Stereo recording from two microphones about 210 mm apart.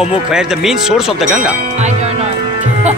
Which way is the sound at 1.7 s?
30° right (ahead or behind).